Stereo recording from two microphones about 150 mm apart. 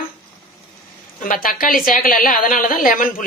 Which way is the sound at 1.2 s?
70° left (ahead or behind).